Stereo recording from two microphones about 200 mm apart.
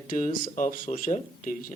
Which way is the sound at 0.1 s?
40° left (ahead or behind).